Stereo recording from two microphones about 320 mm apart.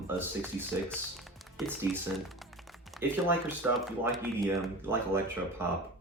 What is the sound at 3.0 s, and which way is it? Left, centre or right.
Speech, centre.